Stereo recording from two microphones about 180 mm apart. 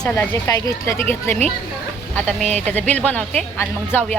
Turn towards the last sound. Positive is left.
turn(degrees=10)  # may be behind; listen again after turning